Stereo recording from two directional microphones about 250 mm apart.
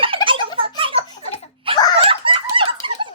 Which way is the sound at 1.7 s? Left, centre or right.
Right.